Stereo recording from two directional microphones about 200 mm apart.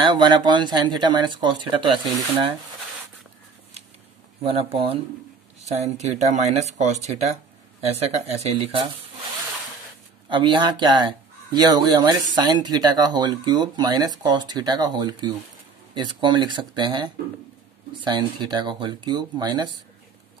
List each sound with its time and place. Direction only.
0.1 s speech: 20° right (ahead or behind)
4.4 s speech: 30° right (ahead or behind)
10.3 s speech: 25° right (ahead or behind)